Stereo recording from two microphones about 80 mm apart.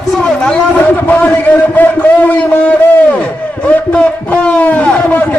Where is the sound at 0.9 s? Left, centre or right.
Left.